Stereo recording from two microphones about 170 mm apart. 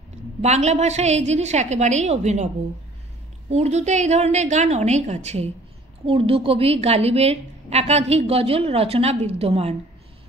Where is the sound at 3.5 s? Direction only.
40° right (ahead or behind).